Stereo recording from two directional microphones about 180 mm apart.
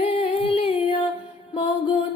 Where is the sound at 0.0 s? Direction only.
30° left (ahead or behind).